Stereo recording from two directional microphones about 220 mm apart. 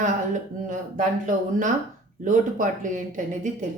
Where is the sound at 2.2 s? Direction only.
35° right (ahead or behind).